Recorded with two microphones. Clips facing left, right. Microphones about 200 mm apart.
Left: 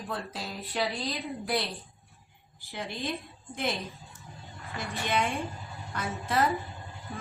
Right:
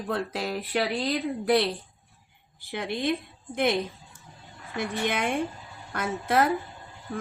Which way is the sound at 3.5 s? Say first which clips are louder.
Right 7 dB; 80° right.